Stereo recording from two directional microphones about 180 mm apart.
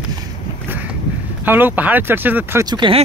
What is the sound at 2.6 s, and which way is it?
Speech, 25° right (ahead or behind).